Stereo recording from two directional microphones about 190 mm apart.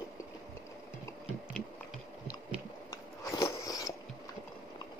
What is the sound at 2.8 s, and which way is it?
Biting, 15° left (ahead or behind).